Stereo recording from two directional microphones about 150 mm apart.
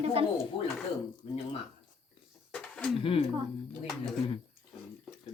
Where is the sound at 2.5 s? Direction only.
5° left (ahead or behind).